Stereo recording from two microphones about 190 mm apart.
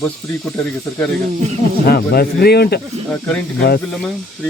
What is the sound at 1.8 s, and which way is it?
Speech, 55° left (ahead or behind).